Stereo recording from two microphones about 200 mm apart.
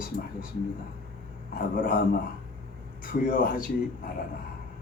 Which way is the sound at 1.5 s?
45° left (ahead or behind).